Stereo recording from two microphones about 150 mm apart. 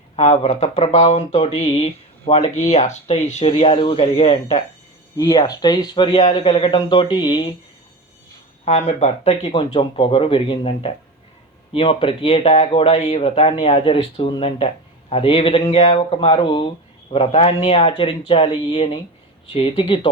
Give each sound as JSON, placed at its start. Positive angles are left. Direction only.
{"t": 0.2, "sound": "speech", "side_deg": 50}
{"t": 5.1, "sound": "speech", "side_deg": 25}
{"t": 8.6, "sound": "speech", "side_deg": 40}